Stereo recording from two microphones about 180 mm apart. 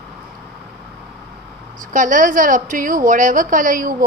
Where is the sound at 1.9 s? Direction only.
45° right (ahead or behind).